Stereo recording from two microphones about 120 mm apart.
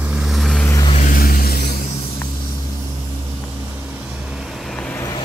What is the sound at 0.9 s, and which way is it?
Vehicle, 85° left.